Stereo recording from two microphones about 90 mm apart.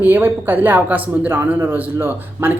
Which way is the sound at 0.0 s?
25° right (ahead or behind).